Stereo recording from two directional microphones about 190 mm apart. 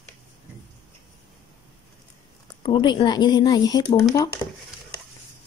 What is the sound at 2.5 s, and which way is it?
Speech, 25° left (ahead or behind).